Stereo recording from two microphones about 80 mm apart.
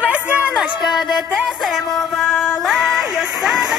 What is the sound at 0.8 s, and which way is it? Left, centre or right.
Music, left.